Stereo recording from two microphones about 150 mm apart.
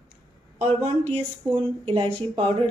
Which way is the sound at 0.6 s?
50° right (ahead or behind).